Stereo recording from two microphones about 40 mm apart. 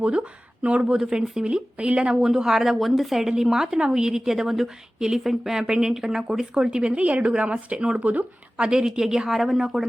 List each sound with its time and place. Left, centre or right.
0.6 s speech: right
0.9 s a woman's voice: centre
2.2 s a woman's voice: centre
5.6 s a woman's voice: right
7.0 s speech: right
8.6 s a woman's voice: centre